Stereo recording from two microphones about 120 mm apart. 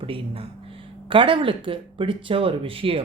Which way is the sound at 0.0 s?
50° right (ahead or behind).